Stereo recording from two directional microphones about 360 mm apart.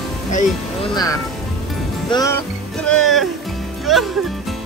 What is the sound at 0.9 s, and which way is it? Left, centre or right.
Speech, centre.